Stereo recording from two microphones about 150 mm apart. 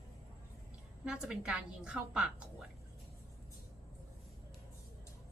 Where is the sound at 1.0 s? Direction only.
5° right (ahead or behind).